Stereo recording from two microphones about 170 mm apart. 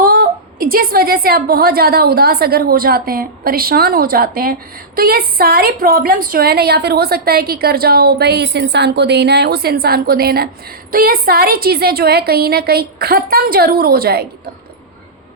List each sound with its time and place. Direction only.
0.0 s a woman's voice: 60° right (ahead or behind)